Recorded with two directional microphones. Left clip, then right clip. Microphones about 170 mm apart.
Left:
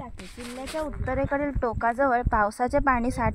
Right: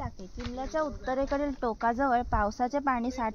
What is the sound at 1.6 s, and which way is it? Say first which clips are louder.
Speech: left 5 dB; 60° left (ahead or behind).